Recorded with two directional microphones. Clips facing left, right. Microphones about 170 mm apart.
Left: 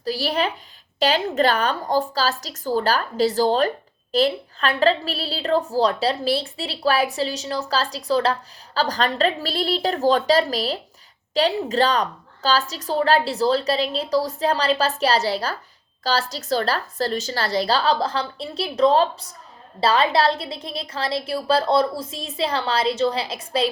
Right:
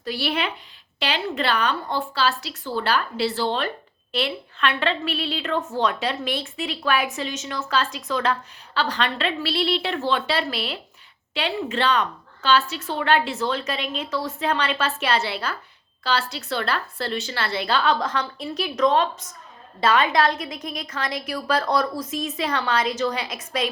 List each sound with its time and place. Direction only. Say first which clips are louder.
0.0 s a woman's voice: left 3 dB; 35° left (ahead or behind)